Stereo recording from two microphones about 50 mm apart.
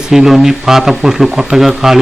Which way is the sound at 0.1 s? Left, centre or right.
Centre.